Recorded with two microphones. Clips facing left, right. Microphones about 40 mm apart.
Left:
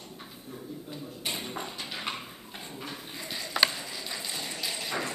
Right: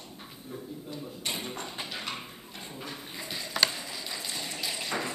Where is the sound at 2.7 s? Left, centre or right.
Centre.